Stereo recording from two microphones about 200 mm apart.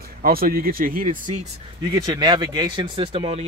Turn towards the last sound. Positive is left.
turn(degrees=-25)  # may be behind; listen again after turning